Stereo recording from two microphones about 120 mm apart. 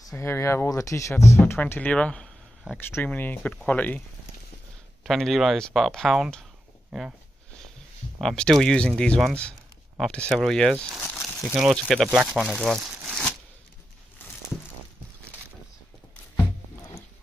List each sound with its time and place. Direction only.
0.2 s speech: 20° left (ahead or behind)
5.0 s speech: centre (ahead or behind)
8.2 s speech: 5° left (ahead or behind)